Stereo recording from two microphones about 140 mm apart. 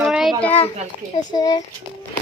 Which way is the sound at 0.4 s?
15° left (ahead or behind).